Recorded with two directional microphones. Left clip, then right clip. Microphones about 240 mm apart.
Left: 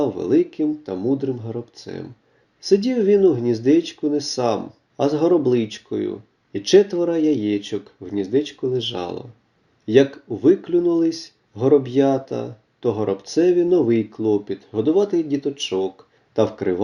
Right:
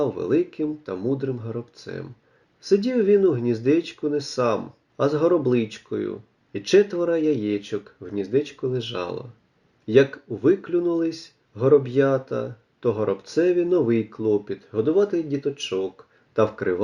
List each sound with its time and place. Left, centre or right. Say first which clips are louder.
0.0 s speech: left 3 dB; centre